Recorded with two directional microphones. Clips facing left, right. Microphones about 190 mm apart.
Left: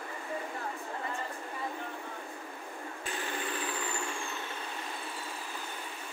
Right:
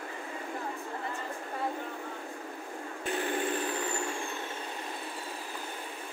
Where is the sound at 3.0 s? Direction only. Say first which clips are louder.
Right 7 dB; 55° right (ahead or behind).